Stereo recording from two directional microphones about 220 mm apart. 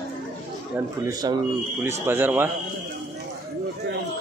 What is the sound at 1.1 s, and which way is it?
Speech, 15° right (ahead or behind).